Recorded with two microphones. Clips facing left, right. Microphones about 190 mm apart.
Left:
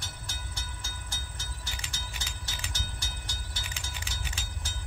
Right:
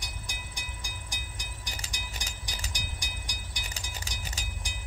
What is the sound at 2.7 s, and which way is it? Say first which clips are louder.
Train: even; 15° right (ahead or behind).